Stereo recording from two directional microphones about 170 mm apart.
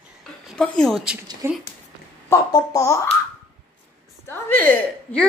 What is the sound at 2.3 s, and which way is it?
Speech, 20° left (ahead or behind).